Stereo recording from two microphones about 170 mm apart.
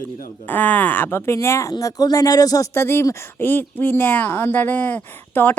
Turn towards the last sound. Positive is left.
turn(degrees=10)  # may be behind; listen again after turning